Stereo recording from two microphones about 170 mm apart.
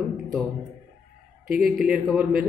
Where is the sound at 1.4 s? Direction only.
55° right (ahead or behind).